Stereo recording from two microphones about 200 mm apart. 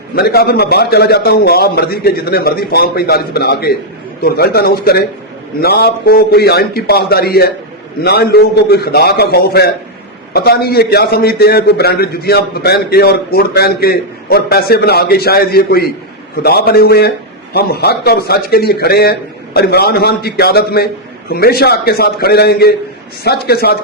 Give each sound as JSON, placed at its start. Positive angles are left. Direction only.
{"t": 0.2, "sound": "a man's voice", "side_deg": 50}